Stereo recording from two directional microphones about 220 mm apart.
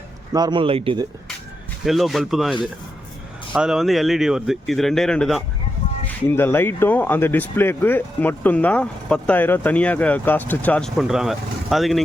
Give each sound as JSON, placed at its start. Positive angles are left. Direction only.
{"t": 0.3, "sound": "speech", "side_deg": -20}
{"t": 1.8, "sound": "speech", "side_deg": 0}